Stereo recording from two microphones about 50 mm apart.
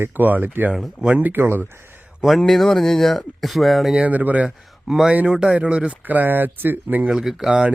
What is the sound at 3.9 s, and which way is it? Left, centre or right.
Speech, right.